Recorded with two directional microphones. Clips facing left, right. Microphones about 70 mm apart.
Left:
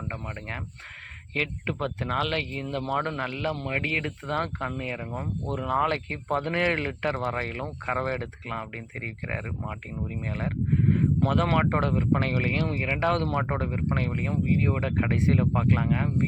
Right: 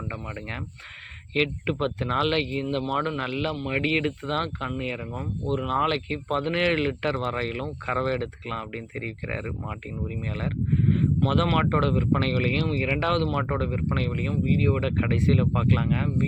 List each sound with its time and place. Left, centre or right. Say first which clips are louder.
0.1 s speech: right 1 dB; centre